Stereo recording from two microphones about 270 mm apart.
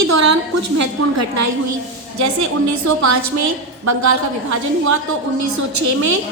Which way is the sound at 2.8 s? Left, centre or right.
Right.